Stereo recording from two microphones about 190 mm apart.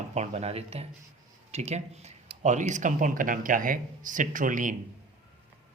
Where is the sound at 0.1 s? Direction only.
35° right (ahead or behind).